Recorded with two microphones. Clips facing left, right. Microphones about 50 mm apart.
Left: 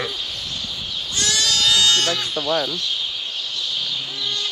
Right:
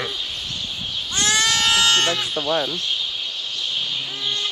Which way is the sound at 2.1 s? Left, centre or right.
Right.